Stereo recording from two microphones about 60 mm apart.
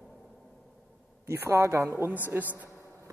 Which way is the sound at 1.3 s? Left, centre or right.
Right.